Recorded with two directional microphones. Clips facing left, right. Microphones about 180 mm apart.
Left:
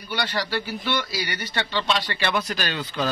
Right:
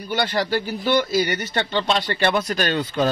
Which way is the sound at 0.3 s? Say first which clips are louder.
Right 5 dB; 45° right (ahead or behind).